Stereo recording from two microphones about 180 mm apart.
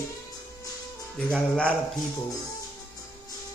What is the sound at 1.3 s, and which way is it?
Speech, 5° left (ahead or behind).